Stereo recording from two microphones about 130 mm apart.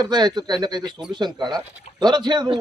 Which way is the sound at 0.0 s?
35° right (ahead or behind).